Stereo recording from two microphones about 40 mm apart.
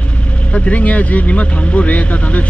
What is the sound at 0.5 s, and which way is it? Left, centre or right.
Speech, left.